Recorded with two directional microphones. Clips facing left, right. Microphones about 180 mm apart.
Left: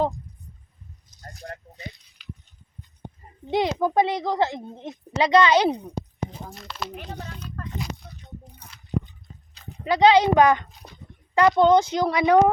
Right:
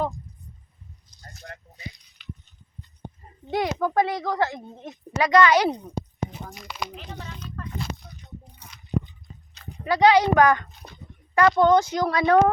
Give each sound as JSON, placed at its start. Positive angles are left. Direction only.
{"t": 3.5, "sound": "a child's voice", "side_deg": 20}
{"t": 6.5, "sound": "speech", "side_deg": 0}
{"t": 6.9, "sound": "speech", "side_deg": 45}
{"t": 9.6, "sound": "a child's voice", "side_deg": 20}